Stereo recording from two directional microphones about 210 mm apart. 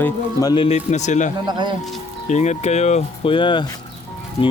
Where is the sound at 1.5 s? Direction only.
20° right (ahead or behind).